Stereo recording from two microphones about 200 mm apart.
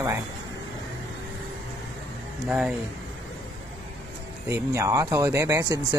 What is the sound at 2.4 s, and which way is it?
Speech, 5° right (ahead or behind).